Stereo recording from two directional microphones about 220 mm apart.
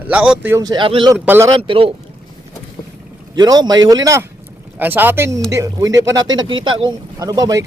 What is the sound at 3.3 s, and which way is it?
Speech, 20° right (ahead or behind).